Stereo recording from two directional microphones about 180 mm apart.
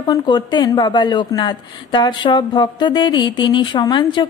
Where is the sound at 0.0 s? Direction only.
25° left (ahead or behind).